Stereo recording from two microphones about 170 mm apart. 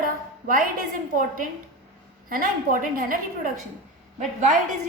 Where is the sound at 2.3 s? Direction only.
55° right (ahead or behind).